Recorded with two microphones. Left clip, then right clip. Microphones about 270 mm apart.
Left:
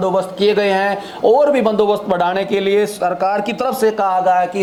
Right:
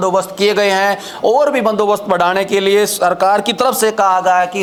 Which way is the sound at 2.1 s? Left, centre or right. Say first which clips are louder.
Right 3 dB; centre.